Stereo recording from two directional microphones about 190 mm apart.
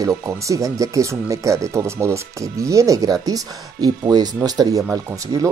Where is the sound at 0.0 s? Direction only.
15° right (ahead or behind).